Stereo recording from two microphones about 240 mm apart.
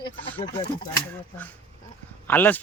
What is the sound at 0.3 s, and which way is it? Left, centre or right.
Speech, left.